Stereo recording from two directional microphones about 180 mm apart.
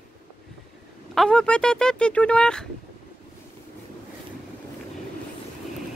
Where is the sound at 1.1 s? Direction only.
5° left (ahead or behind).